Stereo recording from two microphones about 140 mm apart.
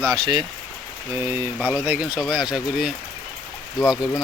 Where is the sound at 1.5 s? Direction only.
10° right (ahead or behind).